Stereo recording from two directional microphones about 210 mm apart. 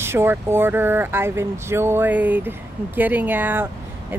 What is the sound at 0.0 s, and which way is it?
Speech, 10° right (ahead or behind).